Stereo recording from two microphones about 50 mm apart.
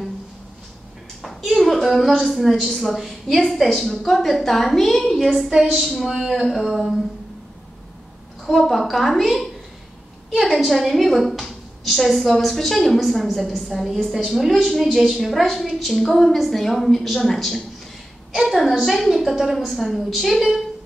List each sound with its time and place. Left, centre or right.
1.2 s a woman's voice: centre
8.5 s a woman's voice: centre